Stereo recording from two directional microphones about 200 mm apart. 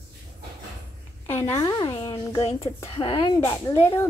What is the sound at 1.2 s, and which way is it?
A woman's voice, 10° left (ahead or behind).